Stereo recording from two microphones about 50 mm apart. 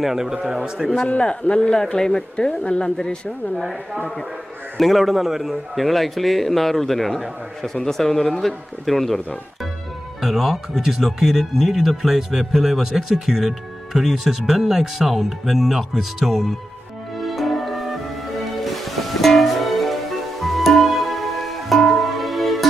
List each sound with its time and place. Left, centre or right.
0.0 s a man's voice: centre
1.2 s speech: left
3.5 s speech: centre
10.2 s speech: centre
17.2 s music: centre